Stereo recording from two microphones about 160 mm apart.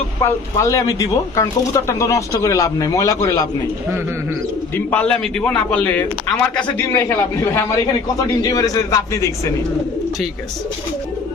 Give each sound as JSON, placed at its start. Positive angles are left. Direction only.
{"t": 0.2, "sound": "speech", "side_deg": 20}
{"t": 4.9, "sound": "a man's voice", "side_deg": 5}